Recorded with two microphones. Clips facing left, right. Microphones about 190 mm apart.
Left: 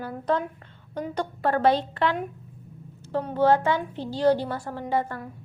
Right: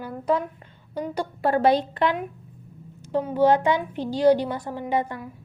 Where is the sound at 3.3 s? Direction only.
15° right (ahead or behind).